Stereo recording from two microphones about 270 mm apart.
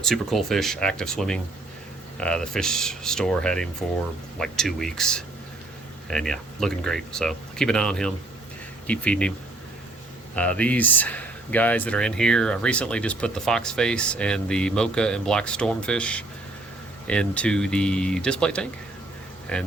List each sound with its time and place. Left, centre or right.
0.0 s speech: centre
10.3 s speech: centre